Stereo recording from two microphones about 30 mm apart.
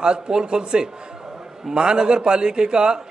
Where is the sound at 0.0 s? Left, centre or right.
Right.